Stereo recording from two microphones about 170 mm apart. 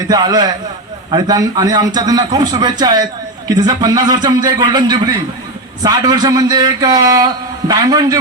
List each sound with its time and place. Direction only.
0.1 s a man's voice: 20° right (ahead or behind)